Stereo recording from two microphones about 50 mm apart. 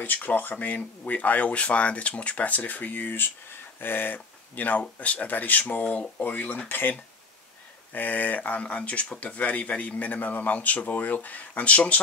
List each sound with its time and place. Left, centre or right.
0.0 s speech: left